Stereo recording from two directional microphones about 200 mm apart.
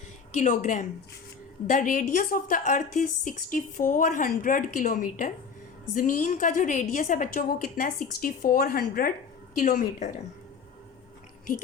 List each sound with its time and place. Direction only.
0.3 s a woman's voice: 40° left (ahead or behind)